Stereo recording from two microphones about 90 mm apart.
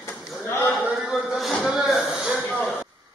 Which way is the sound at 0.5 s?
25° left (ahead or behind).